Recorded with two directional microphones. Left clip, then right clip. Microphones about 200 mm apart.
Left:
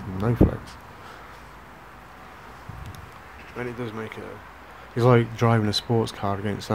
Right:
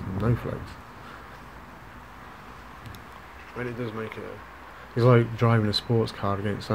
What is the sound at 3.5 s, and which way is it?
Speech, 15° left (ahead or behind).